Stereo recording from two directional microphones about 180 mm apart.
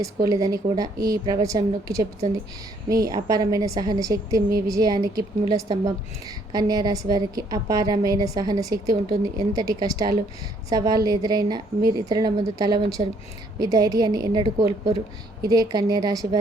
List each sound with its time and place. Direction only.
0.3 s a woman's voice: 20° right (ahead or behind)